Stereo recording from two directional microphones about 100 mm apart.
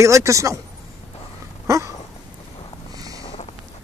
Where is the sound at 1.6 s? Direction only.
30° right (ahead or behind).